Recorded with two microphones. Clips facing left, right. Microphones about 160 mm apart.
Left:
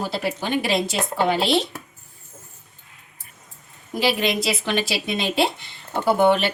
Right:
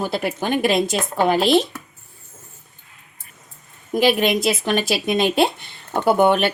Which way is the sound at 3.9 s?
50° right (ahead or behind).